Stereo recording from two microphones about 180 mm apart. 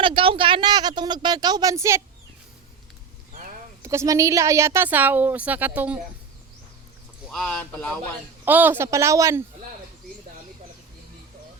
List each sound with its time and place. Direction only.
0.0 s speech: 30° right (ahead or behind)
3.8 s a woman's voice: 15° right (ahead or behind)
7.3 s speech: 5° left (ahead or behind)
8.4 s a woman's voice: 10° right (ahead or behind)